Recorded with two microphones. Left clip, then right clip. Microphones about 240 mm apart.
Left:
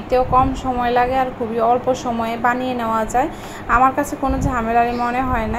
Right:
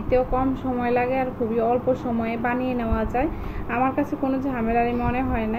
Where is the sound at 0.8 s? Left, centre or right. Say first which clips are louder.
Left 6 dB; left.